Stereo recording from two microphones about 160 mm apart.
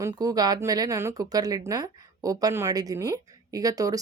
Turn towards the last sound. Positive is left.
turn(degrees=-20)  # may be behind; listen again after turning